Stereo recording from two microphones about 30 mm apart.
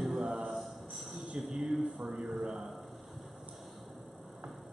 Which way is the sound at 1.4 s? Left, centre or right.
Right.